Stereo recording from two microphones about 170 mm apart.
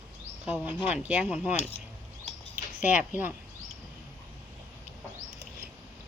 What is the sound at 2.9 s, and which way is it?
Speech, 10° right (ahead or behind).